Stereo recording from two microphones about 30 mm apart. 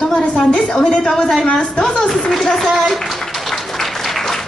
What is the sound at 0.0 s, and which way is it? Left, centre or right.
A woman's voice, left.